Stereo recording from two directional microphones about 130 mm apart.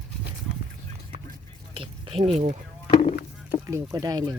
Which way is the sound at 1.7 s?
45° right (ahead or behind).